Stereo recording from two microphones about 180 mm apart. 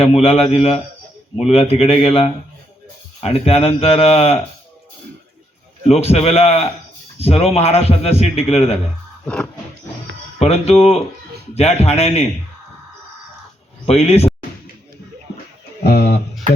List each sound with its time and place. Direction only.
0.0 s speech: 35° left (ahead or behind)
5.9 s speech: 35° left (ahead or behind)
9.2 s music: 5° left (ahead or behind)
10.3 s speech: 35° left (ahead or behind)
13.8 s speech: 35° left (ahead or behind)
15.8 s speech: 60° left (ahead or behind)